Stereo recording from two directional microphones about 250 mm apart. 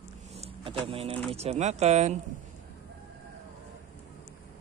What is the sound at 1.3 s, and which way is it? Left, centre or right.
Speech, right.